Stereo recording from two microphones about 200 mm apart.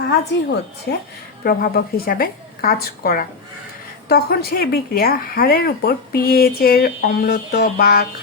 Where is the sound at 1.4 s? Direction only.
50° left (ahead or behind).